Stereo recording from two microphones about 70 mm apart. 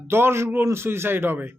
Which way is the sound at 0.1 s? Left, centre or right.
Right.